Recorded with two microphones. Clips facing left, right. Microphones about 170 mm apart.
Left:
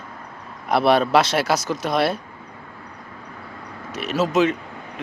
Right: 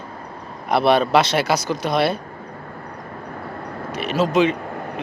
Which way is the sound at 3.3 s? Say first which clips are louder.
Right 8 dB; 50° right (ahead or behind).